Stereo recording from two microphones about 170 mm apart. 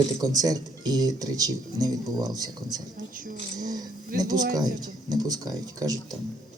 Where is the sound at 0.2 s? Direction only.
20° right (ahead or behind).